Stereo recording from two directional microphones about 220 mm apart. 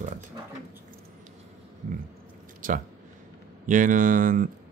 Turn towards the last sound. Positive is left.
turn(degrees=-40)  # may be behind; listen again after turning